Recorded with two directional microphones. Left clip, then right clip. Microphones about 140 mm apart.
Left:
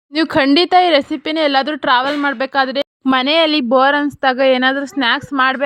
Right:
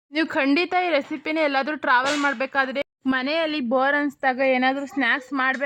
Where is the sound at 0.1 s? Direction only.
40° left (ahead or behind).